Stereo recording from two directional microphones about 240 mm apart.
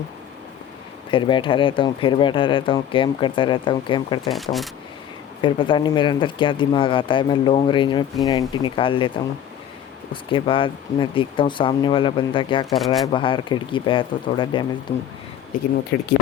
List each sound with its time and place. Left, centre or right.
1.1 s speech: left
4.3 s speech: centre
5.4 s speech: centre
12.7 s speech: centre
13.1 s speech: left